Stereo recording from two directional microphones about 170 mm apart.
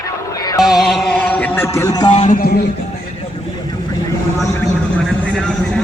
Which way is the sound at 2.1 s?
40° left (ahead or behind).